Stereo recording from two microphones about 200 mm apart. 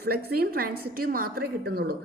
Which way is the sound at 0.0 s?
50° right (ahead or behind).